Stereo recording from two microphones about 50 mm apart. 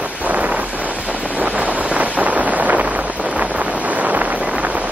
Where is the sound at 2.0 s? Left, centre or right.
Right.